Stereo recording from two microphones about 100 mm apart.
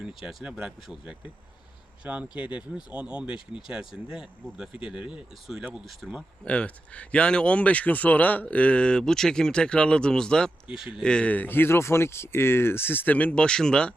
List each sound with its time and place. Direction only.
0.0 s speech: 5° right (ahead or behind)
6.4 s speech: 10° left (ahead or behind)
10.7 s speech: 5° right (ahead or behind)
11.0 s speech: 10° left (ahead or behind)